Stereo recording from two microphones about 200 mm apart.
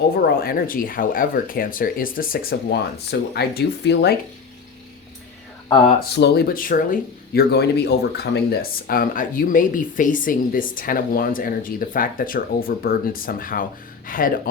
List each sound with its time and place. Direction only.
0.2 s speech: 45° left (ahead or behind)
6.1 s speech: 55° left (ahead or behind)